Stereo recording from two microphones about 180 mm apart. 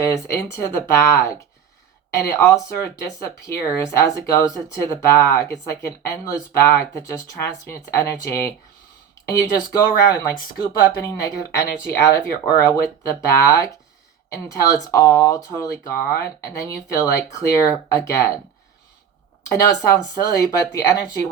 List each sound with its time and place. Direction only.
0.0 s speech: 15° left (ahead or behind)
19.5 s speech: 15° left (ahead or behind)